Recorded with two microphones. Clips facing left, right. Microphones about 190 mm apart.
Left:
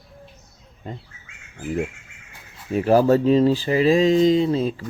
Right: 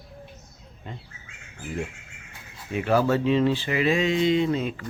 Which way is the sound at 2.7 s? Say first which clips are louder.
Left 6 dB; 40° left (ahead or behind).